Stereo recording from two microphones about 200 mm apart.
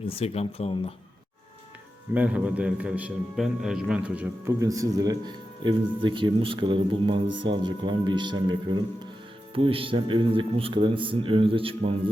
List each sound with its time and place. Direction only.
0.2 s speech: 30° left (ahead or behind)
2.1 s a man's voice: 5° right (ahead or behind); by 11.9 s 25° right (ahead or behind)